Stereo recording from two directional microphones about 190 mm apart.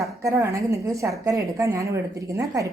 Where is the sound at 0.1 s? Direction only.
15° right (ahead or behind).